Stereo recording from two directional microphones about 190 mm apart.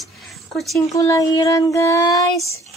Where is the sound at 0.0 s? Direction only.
Centre (ahead or behind).